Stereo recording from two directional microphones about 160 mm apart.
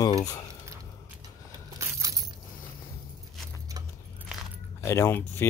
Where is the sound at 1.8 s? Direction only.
20° right (ahead or behind).